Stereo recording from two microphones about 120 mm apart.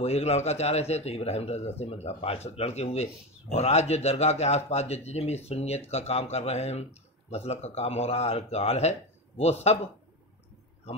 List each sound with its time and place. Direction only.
0.0 s a man's voice: 60° left (ahead or behind)